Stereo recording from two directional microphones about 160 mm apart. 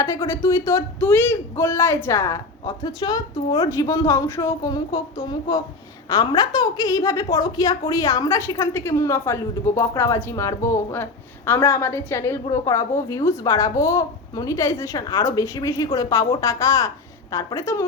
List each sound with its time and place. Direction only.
0.0 s a woman's voice: 20° left (ahead or behind)